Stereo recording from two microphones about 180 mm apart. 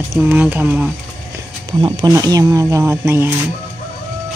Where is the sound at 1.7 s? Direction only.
20° right (ahead or behind).